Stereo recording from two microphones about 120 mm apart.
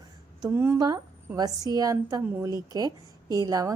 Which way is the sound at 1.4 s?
30° right (ahead or behind).